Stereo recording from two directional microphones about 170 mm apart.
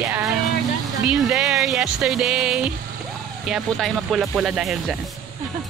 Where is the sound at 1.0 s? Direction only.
5° right (ahead or behind).